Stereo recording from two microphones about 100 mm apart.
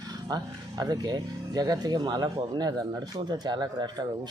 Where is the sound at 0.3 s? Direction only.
40° right (ahead or behind).